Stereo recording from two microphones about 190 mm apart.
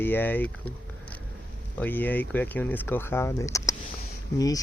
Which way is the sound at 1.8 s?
10° left (ahead or behind).